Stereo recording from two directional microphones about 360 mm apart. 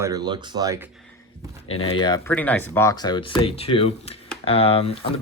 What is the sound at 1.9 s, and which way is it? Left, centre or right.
Speech, centre.